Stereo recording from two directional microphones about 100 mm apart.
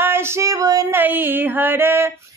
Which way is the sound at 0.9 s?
20° right (ahead or behind).